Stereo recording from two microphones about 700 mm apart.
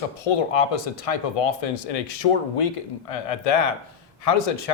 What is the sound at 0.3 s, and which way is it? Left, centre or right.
Speech, left.